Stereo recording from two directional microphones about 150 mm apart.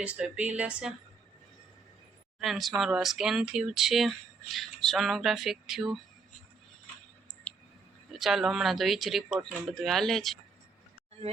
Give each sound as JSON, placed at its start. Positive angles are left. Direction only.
{"t": 0.0, "sound": "speech", "side_deg": -10}
{"t": 2.4, "sound": "speech", "side_deg": 0}
{"t": 8.1, "sound": "speech", "side_deg": 0}